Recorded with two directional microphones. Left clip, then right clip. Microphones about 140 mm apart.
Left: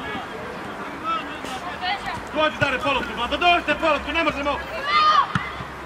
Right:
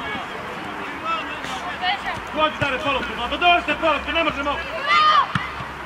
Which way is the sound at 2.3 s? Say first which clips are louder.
Even; 30° left (ahead or behind).